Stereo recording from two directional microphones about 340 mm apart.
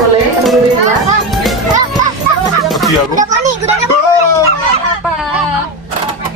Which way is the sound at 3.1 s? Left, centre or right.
Right.